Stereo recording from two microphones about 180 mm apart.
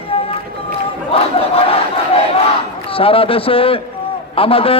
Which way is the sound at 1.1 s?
30° left (ahead or behind).